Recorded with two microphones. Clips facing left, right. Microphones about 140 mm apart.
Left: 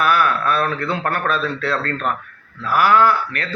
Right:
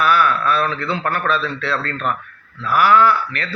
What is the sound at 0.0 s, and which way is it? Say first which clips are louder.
Speech: right 1 dB; 45° left (ahead or behind).